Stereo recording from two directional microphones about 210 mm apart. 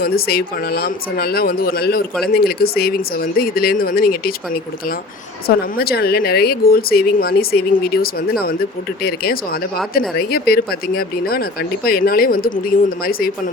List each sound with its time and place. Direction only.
0.0 s speech: 45° left (ahead or behind)
5.5 s speech: 45° left (ahead or behind)